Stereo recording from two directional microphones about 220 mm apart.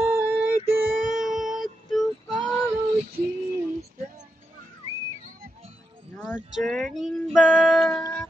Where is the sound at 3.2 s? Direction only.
45° right (ahead or behind).